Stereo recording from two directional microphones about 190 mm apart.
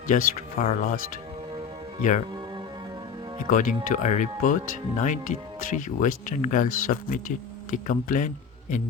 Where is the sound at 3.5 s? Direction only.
40° left (ahead or behind).